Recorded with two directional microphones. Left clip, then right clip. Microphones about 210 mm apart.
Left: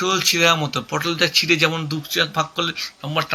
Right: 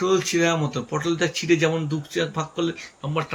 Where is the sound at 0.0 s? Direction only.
20° right (ahead or behind).